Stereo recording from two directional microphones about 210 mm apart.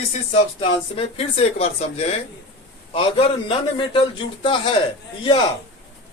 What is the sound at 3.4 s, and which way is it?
Speech, 25° left (ahead or behind).